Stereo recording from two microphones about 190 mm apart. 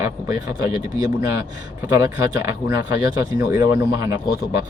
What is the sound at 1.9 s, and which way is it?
Speech, 15° right (ahead or behind).